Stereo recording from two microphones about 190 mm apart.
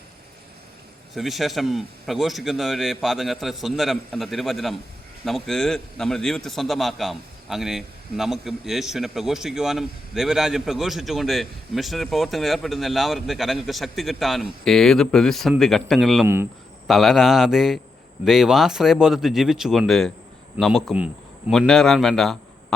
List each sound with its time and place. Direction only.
1.1 s a man's voice: centre (ahead or behind)
16.2 s speech: 15° right (ahead or behind)
16.8 s a man's voice: centre (ahead or behind)